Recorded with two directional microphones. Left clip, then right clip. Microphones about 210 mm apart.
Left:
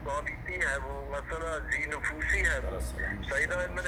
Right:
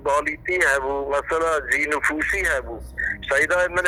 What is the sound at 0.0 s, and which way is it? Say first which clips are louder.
Speech: right 13 dB; 50° right (ahead or behind).